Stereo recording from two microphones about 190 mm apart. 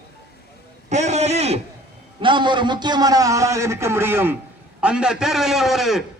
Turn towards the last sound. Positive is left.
turn(degrees=0)  # may be behind; listen again after turning